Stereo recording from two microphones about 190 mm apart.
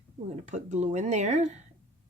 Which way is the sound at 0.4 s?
40° right (ahead or behind).